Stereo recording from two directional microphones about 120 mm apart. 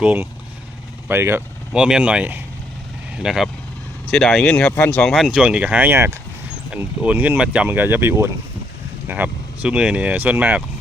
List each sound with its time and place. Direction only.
0.0 s speech: 15° right (ahead or behind)
1.7 s speech: 5° right (ahead or behind)